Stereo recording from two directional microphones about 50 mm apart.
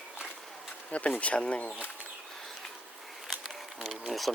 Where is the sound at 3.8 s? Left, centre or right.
Centre.